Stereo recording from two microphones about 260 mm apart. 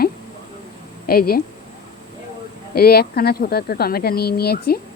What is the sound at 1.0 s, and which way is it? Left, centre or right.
Speech, left.